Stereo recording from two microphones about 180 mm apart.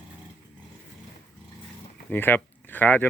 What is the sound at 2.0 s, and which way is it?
Speech, 10° left (ahead or behind).